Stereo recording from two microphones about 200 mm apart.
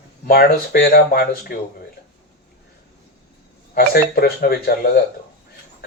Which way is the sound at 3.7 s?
50° left (ahead or behind).